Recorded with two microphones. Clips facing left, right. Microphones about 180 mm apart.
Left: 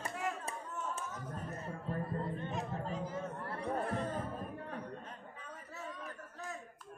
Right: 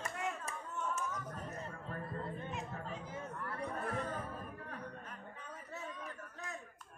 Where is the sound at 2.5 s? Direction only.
35° left (ahead or behind).